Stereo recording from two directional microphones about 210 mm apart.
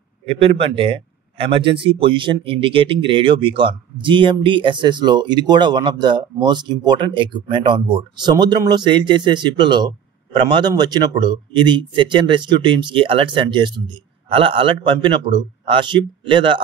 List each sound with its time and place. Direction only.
0.3 s a man's voice: 25° right (ahead or behind)